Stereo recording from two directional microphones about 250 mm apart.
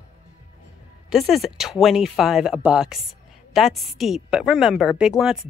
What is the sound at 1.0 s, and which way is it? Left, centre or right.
A woman's voice, centre.